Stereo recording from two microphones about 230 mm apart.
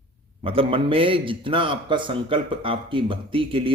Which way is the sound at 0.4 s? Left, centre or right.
Right.